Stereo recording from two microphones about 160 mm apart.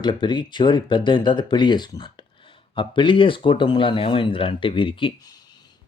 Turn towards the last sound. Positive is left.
turn(degrees=25)  # may be behind; listen again after turning